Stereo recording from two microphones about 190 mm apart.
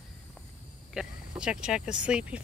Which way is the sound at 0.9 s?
5° right (ahead or behind).